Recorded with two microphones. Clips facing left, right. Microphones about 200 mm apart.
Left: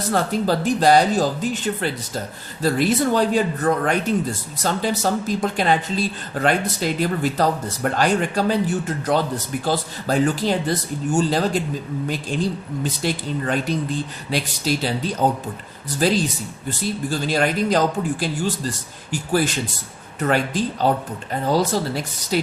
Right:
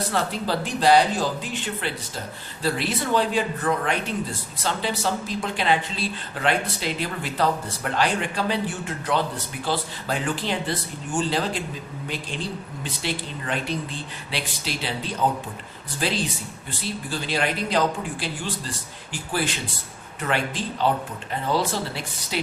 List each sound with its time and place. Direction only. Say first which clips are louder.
0.1 s speech: left 9 dB; 45° left (ahead or behind)